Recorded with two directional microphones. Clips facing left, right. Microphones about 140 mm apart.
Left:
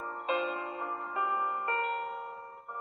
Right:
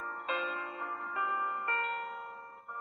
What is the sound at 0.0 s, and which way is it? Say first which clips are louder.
Music: left 5 dB; 25° left (ahead or behind).